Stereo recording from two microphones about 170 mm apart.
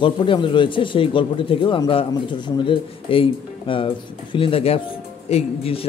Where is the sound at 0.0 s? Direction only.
30° left (ahead or behind).